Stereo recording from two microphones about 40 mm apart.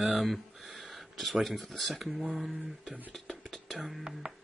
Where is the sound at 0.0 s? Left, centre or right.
Centre.